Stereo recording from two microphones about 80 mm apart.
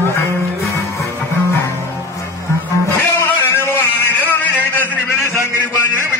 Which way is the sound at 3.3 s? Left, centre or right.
Left.